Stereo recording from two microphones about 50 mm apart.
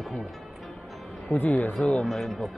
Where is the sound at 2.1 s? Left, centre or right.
Centre.